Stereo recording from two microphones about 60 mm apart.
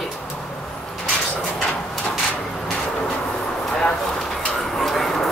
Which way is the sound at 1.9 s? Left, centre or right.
Centre.